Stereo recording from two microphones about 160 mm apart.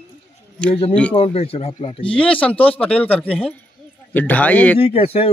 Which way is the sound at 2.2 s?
10° left (ahead or behind).